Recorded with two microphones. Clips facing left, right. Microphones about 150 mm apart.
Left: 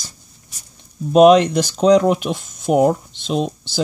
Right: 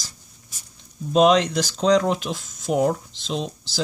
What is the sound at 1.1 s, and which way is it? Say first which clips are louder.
Speech: left 7 dB; 60° left (ahead or behind).